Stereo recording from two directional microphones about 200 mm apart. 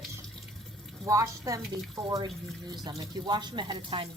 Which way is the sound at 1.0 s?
15° right (ahead or behind).